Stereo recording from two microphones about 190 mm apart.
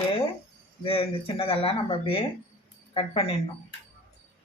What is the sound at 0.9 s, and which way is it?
Speech, 30° left (ahead or behind).